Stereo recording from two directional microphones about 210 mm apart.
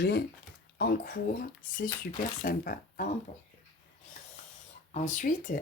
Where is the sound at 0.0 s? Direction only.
50° left (ahead or behind).